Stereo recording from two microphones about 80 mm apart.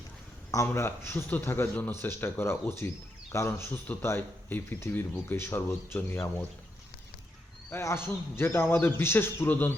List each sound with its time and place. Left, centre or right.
0.5 s speech: left
7.7 s speech: left